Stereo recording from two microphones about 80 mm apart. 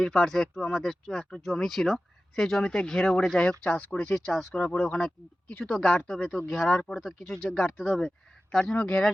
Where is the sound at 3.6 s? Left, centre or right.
Centre.